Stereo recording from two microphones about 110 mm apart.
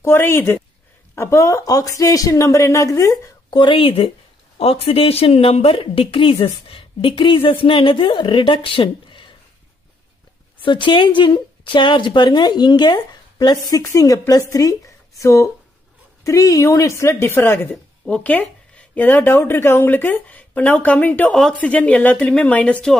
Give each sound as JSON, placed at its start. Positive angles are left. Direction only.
{"t": 0.0, "sound": "speech", "side_deg": 20}
{"t": 3.4, "sound": "a woman's voice", "side_deg": 50}
{"t": 10.6, "sound": "a woman's voice", "side_deg": 45}